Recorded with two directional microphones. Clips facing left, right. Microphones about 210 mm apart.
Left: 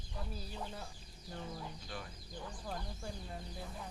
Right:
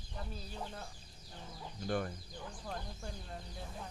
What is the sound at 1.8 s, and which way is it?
Speech, 55° right (ahead or behind).